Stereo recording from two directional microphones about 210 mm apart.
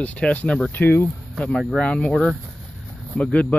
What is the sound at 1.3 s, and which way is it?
Speech, centre (ahead or behind).